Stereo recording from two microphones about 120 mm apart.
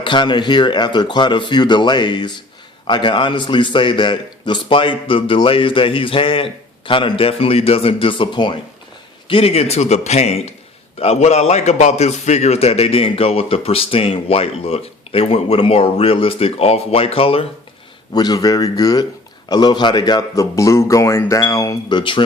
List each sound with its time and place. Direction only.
0.0 s a man's voice: 40° left (ahead or behind)
18.1 s a man's voice: 35° left (ahead or behind)
21.9 s a man's voice: 40° left (ahead or behind)